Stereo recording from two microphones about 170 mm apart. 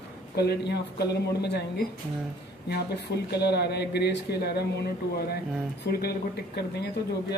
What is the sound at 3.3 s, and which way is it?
Speech, 75° left (ahead or behind).